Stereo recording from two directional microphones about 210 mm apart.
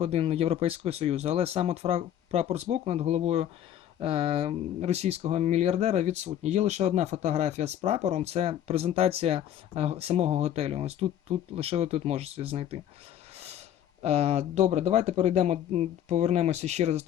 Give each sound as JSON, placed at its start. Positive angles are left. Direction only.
{"t": 0.0, "sound": "speech", "side_deg": -30}
{"t": 14.0, "sound": "speech", "side_deg": -30}